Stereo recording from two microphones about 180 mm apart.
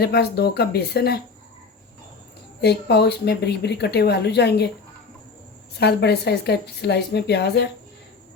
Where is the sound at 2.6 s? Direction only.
65° left (ahead or behind).